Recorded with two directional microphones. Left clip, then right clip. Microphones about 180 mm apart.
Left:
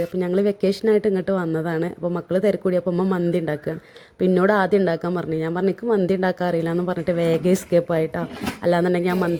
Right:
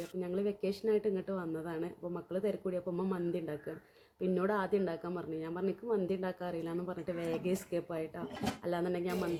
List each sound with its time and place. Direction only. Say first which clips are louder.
0.2 s speech: left 14 dB; 35° left (ahead or behind)